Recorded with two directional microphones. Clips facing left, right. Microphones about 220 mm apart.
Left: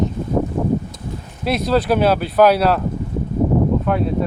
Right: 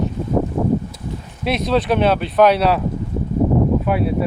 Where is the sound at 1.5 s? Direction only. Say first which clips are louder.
Left 1 dB; centre (ahead or behind).